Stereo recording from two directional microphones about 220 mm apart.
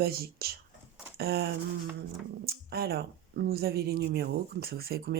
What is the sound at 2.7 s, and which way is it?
Speech, 45° right (ahead or behind).